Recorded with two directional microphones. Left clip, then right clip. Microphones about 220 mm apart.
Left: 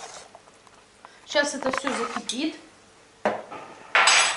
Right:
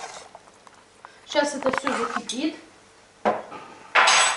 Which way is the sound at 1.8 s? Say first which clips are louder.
Right 2 dB; 15° right (ahead or behind).